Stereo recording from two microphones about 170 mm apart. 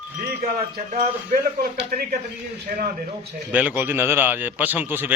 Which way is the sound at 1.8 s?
65° right (ahead or behind).